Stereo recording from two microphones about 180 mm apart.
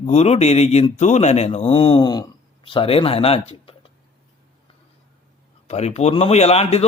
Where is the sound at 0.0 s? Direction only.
35° left (ahead or behind).